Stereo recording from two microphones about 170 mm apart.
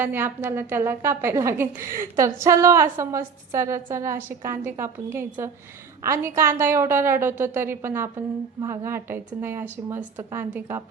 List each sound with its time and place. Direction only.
0.0 s a woman's voice: 10° right (ahead or behind)